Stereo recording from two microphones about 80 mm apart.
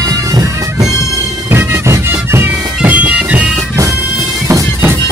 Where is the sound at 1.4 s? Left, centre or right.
Right.